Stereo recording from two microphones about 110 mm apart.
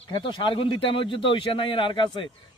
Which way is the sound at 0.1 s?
50° left (ahead or behind).